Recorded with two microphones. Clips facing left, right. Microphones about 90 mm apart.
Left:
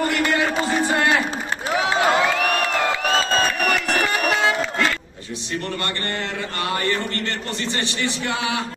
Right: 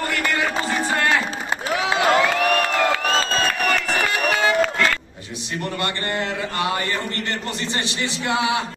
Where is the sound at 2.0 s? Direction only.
20° left (ahead or behind).